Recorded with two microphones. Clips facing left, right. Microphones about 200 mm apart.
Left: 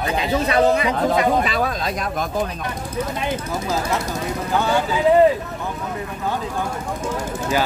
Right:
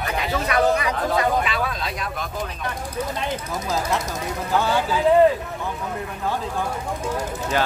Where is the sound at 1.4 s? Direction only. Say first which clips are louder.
Left 4 dB; 40° left (ahead or behind).